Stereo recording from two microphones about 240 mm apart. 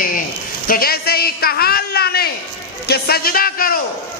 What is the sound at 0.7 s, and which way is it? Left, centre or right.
A man's voice, left.